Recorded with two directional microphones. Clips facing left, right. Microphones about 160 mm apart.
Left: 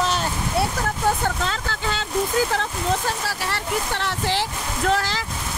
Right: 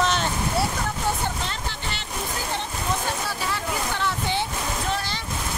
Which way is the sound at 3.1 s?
85° left.